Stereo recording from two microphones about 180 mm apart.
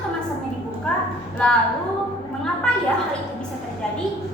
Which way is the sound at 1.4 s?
5° left (ahead or behind).